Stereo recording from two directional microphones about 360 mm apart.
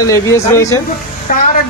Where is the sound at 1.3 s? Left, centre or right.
Left.